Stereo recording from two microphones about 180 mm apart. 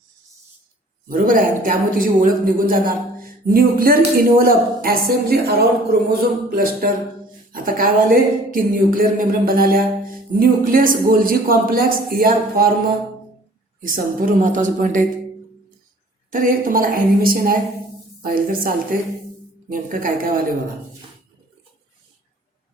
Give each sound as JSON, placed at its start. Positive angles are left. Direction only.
{"t": 1.0, "sound": "speech", "side_deg": -50}
{"t": 13.8, "sound": "speech", "side_deg": -50}
{"t": 16.3, "sound": "a woman's voice", "side_deg": -50}
{"t": 19.7, "sound": "speech", "side_deg": -50}